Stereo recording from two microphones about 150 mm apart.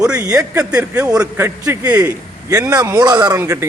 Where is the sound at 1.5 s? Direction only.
20° right (ahead or behind).